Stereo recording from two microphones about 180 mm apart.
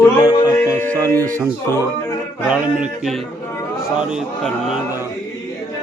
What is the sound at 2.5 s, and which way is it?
Music, 10° right (ahead or behind).